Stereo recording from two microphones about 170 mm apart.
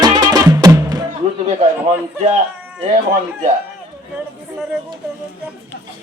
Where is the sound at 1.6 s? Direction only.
40° right (ahead or behind).